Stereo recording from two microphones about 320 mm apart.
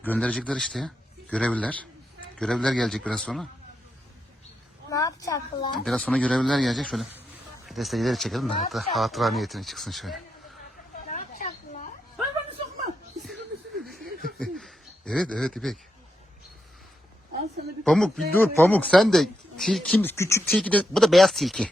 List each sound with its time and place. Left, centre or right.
0.0 s speech: centre
4.9 s speech: centre
11.1 s a sound: left
13.2 s a sound: centre
14.3 s speech: centre
17.8 s speech: centre